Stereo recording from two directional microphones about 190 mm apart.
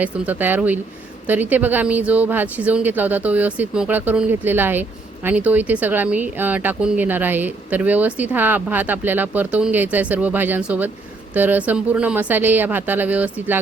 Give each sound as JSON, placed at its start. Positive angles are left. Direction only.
{"t": 0.0, "sound": "speech", "side_deg": -10}